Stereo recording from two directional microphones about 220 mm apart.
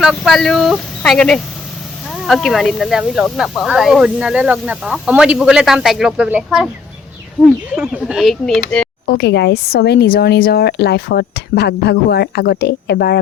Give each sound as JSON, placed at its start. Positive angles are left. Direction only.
{"t": 0.0, "sound": "speech", "side_deg": 0}
{"t": 7.4, "sound": "speech", "side_deg": 15}
{"t": 7.8, "sound": "speech", "side_deg": -5}
{"t": 9.0, "sound": "speech", "side_deg": 50}